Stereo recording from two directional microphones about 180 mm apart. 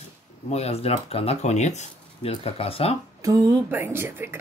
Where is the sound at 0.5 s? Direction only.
35° left (ahead or behind).